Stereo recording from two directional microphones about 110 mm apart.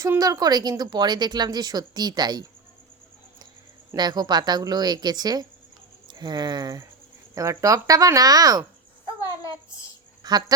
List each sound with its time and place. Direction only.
0.0 s speech: 30° right (ahead or behind)
3.9 s speech: 40° right (ahead or behind)
9.0 s a sound: 30° left (ahead or behind)
10.2 s dog: 40° right (ahead or behind)